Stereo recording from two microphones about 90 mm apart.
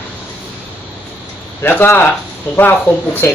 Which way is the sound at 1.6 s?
25° left (ahead or behind).